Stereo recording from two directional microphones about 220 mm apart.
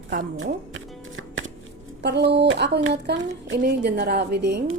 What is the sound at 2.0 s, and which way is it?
Speech, 50° right (ahead or behind).